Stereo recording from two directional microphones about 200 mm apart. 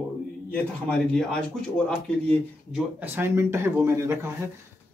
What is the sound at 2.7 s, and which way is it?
A man's voice, 10° right (ahead or behind).